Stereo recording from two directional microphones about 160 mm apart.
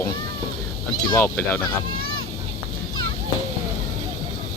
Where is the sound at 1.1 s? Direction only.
15° left (ahead or behind).